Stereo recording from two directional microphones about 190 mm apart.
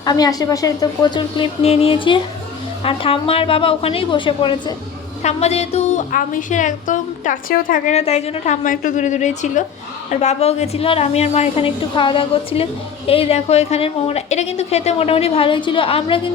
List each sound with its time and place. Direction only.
0.0 s a woman's voice: 20° left (ahead or behind)